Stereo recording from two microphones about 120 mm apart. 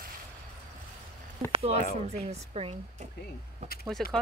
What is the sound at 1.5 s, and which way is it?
Speech, 55° right (ahead or behind).